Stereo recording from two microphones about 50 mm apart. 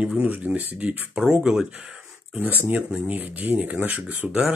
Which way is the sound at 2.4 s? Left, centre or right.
Right.